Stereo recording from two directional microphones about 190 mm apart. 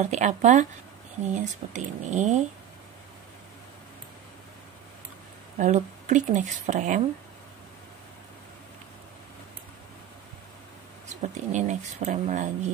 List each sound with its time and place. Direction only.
0.0 s speech: 40° right (ahead or behind)
5.6 s speech: 40° right (ahead or behind)
11.1 s speech: 40° right (ahead or behind)